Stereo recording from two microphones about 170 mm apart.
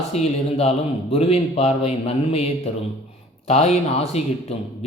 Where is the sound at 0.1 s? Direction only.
40° left (ahead or behind).